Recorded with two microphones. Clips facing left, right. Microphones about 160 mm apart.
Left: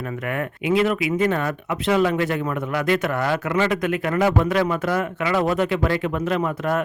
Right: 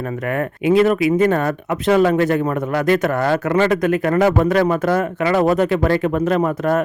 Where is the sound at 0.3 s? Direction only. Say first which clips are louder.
Right 6 dB; 40° right (ahead or behind).